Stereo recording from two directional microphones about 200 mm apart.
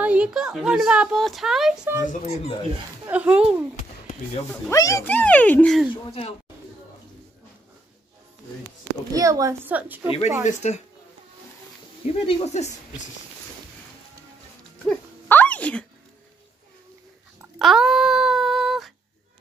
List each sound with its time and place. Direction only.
0.0 s speech: 5° right (ahead or behind)
2.0 s speech: 30° left (ahead or behind)
3.1 s a woman's voice: 5° right (ahead or behind)
4.6 s speech: 15° left (ahead or behind); by 5.9 s centre (ahead or behind)
9.1 s a woman's voice: 15° right (ahead or behind)
10.4 s speech: 35° left (ahead or behind)
12.1 s speech: 30° left (ahead or behind)
14.9 s a sound: 10° left (ahead or behind)
17.4 s a sound: centre (ahead or behind)